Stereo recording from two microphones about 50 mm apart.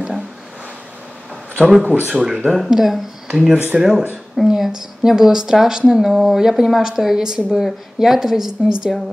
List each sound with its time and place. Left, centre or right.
1.7 s speech: centre
2.0 s speech: right
2.5 s speech: centre